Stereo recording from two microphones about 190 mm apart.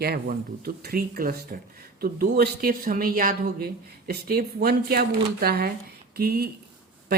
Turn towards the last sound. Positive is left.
turn(degrees=-55)  # may be behind; listen again after turning